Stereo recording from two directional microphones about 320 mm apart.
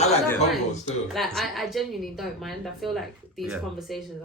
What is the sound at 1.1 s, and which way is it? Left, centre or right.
Speech, centre.